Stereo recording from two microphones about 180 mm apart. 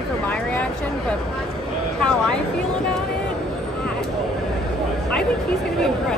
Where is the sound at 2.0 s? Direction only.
5° left (ahead or behind).